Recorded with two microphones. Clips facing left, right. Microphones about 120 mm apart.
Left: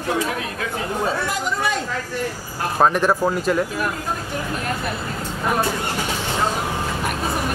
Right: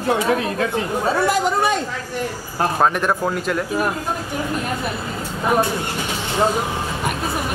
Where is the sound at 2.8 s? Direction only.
5° left (ahead or behind).